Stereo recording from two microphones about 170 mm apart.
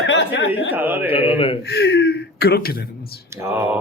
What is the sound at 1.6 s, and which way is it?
Speech, 75° left (ahead or behind).